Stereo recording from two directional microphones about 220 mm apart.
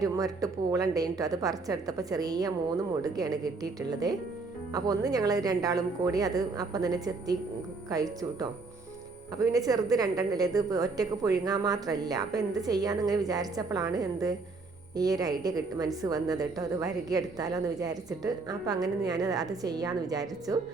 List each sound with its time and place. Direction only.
0.0 s a woman's voice: 15° right (ahead or behind)